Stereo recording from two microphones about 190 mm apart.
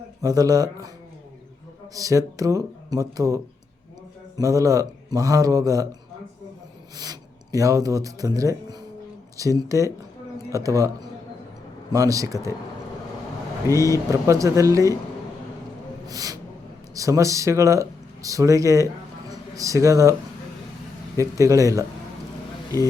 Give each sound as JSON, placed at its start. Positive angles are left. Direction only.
{"t": 0.2, "sound": "speech", "side_deg": -20}
{"t": 1.9, "sound": "speech", "side_deg": -15}
{"t": 6.9, "sound": "speech", "side_deg": -20}
{"t": 13.7, "sound": "speech", "side_deg": 15}
{"t": 14.1, "sound": "speech", "side_deg": -15}
{"t": 16.0, "sound": "a sound", "side_deg": -20}
{"t": 16.9, "sound": "speech", "side_deg": -15}
{"t": 21.2, "sound": "speech", "side_deg": -15}